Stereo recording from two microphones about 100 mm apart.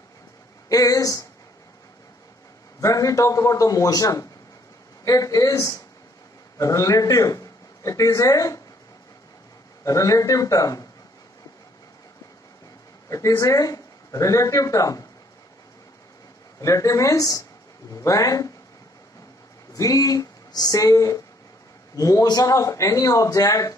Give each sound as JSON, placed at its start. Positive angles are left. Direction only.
{"t": 0.7, "sound": "a sound", "side_deg": 35}
{"t": 2.8, "sound": "a man's voice", "side_deg": 35}
{"t": 9.8, "sound": "a man's voice", "side_deg": 35}
{"t": 13.4, "sound": "speech", "side_deg": 35}
{"t": 16.6, "sound": "a man's voice", "side_deg": 35}
{"t": 19.7, "sound": "a man's voice", "side_deg": 35}